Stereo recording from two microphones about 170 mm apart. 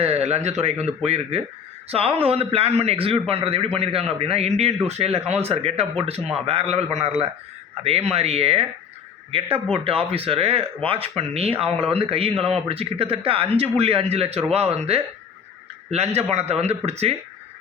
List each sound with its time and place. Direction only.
0.0 s a man's voice: 40° right (ahead or behind)
9.7 s a man's voice: 35° right (ahead or behind)